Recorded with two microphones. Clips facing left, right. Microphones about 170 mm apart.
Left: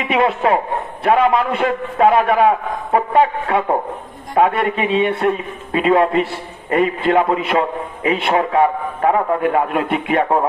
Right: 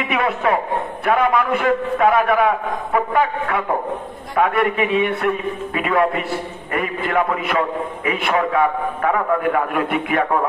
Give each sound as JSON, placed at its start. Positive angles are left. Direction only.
{"t": 0.1, "sound": "a man's voice", "side_deg": 30}